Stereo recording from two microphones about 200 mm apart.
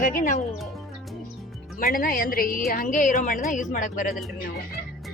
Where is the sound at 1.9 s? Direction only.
45° left (ahead or behind).